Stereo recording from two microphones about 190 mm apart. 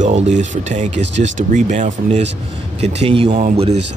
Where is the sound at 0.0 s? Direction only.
40° right (ahead or behind).